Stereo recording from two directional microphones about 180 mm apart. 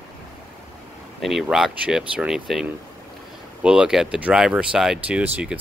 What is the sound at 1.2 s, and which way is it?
Speech, centre (ahead or behind).